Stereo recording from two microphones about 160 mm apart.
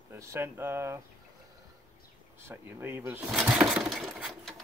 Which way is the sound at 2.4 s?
15° right (ahead or behind).